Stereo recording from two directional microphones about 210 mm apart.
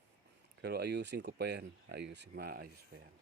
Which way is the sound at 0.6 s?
50° right (ahead or behind).